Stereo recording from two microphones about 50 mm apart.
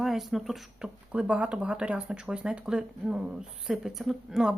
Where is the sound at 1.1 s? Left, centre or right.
Right.